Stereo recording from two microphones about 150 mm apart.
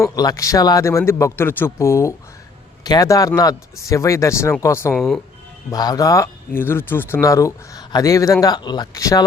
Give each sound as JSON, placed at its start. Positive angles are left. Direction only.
{"t": 0.2, "sound": "speech", "side_deg": 25}
{"t": 4.9, "sound": "speech", "side_deg": 0}
{"t": 5.7, "sound": "speech", "side_deg": 25}